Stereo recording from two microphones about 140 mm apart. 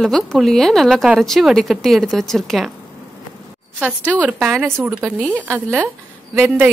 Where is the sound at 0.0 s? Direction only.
Centre (ahead or behind).